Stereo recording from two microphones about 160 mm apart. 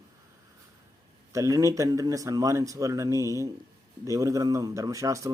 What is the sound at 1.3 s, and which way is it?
Speech, 20° right (ahead or behind).